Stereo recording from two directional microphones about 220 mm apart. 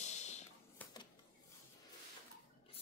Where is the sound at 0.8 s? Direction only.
5° left (ahead or behind).